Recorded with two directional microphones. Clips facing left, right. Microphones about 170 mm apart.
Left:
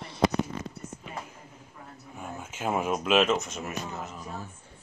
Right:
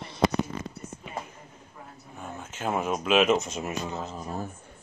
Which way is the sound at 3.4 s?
25° right (ahead or behind).